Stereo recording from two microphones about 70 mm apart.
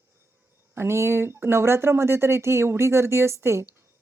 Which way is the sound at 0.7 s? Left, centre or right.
Right.